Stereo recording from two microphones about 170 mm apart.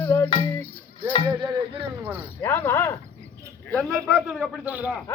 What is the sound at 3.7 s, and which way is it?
A man's voice, centre (ahead or behind).